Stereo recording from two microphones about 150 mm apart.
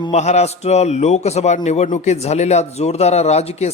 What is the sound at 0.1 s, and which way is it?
A man's voice, 45° left (ahead or behind).